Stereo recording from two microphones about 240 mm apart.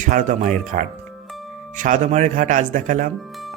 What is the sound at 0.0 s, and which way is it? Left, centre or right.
Speech, right.